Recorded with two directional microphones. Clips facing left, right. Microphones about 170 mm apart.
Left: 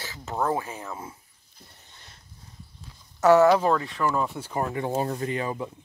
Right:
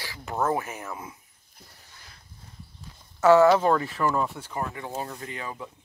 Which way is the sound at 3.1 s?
20° left (ahead or behind).